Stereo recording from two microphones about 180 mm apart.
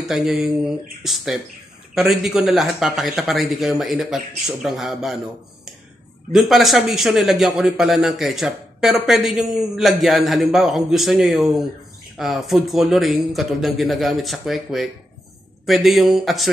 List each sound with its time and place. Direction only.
0.0 s a man's voice: centre (ahead or behind)
6.3 s a man's voice: centre (ahead or behind)